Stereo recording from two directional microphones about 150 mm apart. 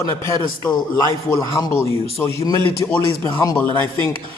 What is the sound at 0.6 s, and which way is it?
A man's voice, 25° left (ahead or behind).